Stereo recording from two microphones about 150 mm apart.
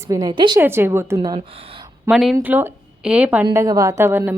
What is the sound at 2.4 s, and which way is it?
Speech, 10° right (ahead or behind).